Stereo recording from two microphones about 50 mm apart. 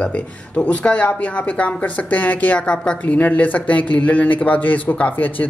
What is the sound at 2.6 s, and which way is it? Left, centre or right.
Speech, centre.